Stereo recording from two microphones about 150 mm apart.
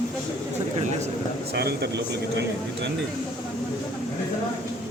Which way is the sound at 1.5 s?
90° right.